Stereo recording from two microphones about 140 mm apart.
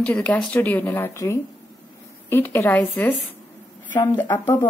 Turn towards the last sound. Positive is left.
turn(degrees=15)  # may be behind; listen again after turning